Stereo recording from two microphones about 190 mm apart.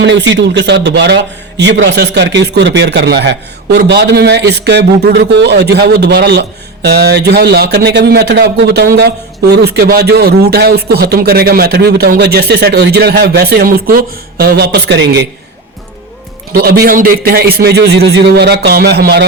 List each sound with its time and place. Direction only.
0.0 s speech: 65° right (ahead or behind)
16.5 s speech: 55° right (ahead or behind)